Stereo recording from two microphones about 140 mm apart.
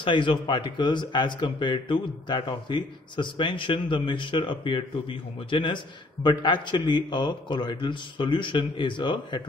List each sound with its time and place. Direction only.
0.0 s a man's voice: 35° left (ahead or behind)